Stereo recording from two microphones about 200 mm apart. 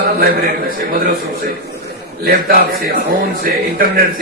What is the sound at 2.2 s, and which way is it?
Speech, 50° right (ahead or behind).